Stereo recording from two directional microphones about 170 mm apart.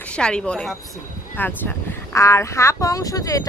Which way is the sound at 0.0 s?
5° left (ahead or behind).